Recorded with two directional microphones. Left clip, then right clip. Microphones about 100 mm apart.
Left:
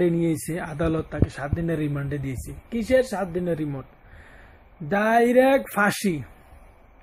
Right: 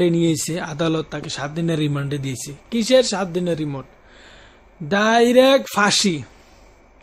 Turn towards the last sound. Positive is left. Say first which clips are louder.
# right 5 dB
turn(degrees=-10)  # may be behind; listen again after turning